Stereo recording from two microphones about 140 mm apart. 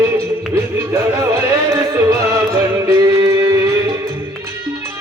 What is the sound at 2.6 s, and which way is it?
Music, 25° right (ahead or behind).